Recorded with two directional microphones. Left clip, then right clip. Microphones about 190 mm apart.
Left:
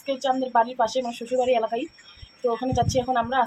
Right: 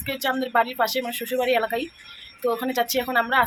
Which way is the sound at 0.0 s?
Centre (ahead or behind).